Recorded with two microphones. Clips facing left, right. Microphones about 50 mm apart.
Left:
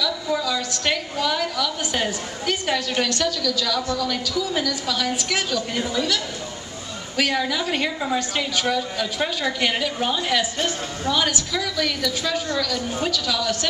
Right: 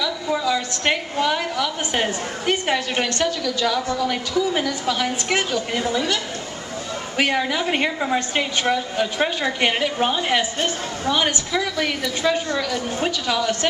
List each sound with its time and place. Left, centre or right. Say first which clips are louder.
0.0 s a woman's voice: right 1 dB; right
7.2 s a woman's voice: right 1 dB; right